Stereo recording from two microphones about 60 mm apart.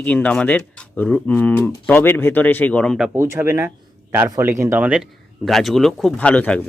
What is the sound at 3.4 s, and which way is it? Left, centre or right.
A man's voice, right.